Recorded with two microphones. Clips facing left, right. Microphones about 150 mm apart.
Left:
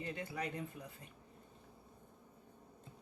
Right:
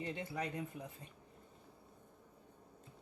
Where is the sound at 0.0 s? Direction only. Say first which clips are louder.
Right 1 dB; 20° right (ahead or behind).